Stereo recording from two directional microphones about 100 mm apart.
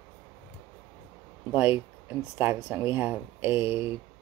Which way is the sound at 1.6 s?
20° right (ahead or behind).